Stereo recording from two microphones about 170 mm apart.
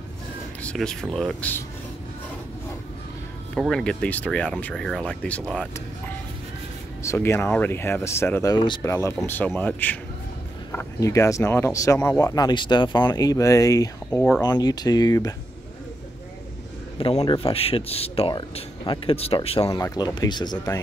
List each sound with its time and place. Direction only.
0.6 s speech: 5° left (ahead or behind)
3.5 s speech: centre (ahead or behind)
7.0 s speech: 15° left (ahead or behind)
17.2 s speech: 30° left (ahead or behind)
19.6 s speech: 20° left (ahead or behind)